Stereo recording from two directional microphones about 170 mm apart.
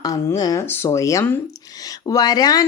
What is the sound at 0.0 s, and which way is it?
Speech, 20° left (ahead or behind).